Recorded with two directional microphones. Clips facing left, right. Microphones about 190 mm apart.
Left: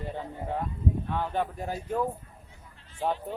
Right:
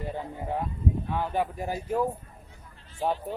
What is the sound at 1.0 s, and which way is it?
Speech, 10° right (ahead or behind).